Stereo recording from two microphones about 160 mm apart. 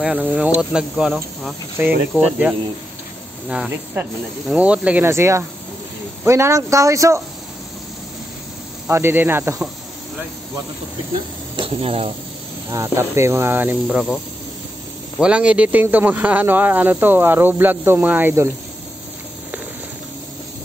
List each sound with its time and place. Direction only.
0.0 s speech: 10° right (ahead or behind)
8.8 s speech: 15° right (ahead or behind)
11.5 s speech: 35° right (ahead or behind)
12.7 s speech: 20° right (ahead or behind)